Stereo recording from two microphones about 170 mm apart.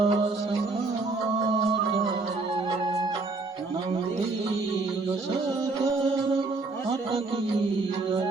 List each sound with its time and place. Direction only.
0.0 s music: 35° right (ahead or behind)